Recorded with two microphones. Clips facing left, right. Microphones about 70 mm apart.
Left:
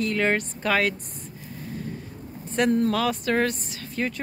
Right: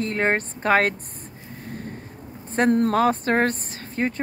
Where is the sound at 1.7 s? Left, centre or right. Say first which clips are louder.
Even; right.